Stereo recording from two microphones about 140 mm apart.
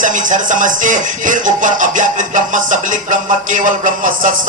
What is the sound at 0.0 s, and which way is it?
Music, 65° right (ahead or behind).